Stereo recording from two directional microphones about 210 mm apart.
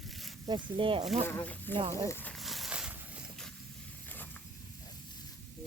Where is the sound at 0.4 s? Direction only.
20° right (ahead or behind).